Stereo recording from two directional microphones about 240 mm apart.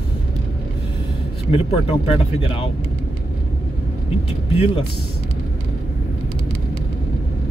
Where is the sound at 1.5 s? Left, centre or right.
Left.